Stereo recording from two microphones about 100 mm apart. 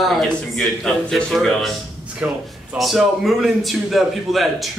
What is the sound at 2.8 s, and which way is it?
A man's voice, centre (ahead or behind).